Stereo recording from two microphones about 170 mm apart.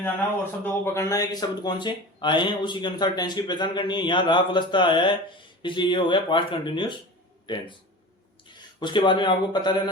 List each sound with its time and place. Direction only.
0.6 s speech: 15° left (ahead or behind)
8.8 s speech: 30° left (ahead or behind)